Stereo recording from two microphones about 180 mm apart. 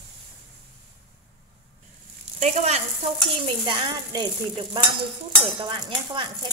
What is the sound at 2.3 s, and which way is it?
Speech, 40° right (ahead or behind).